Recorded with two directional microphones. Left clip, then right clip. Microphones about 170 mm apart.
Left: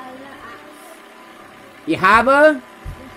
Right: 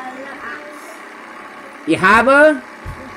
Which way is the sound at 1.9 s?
5° left (ahead or behind).